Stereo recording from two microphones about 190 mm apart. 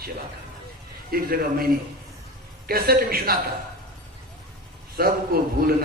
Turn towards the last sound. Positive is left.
turn(degrees=-50)  # may be behind; listen again after turning